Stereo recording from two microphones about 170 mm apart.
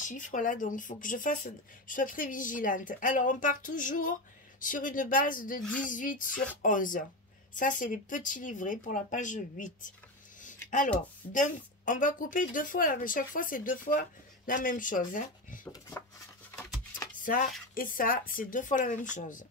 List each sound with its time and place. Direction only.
0.0 s a woman's voice: 50° left (ahead or behind)
5.6 s speech: 10° left (ahead or behind)
5.9 s a woman's voice: 50° left (ahead or behind)
10.4 s a sound: 50° left (ahead or behind)
11.3 s a woman's voice: 50° left (ahead or behind)
17.2 s a woman's voice: 55° left (ahead or behind)